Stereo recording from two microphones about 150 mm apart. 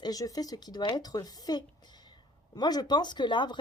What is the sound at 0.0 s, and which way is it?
Speech, 25° left (ahead or behind).